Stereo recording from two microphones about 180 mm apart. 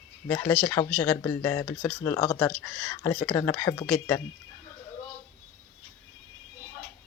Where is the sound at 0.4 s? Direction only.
10° left (ahead or behind).